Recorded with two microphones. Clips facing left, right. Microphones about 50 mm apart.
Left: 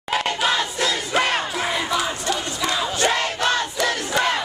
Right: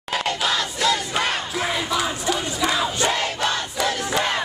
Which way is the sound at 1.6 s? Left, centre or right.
Centre.